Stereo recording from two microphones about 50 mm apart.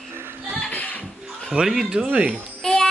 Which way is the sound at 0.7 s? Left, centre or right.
Left.